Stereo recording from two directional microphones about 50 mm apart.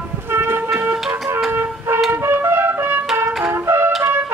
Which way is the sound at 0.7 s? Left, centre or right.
Centre.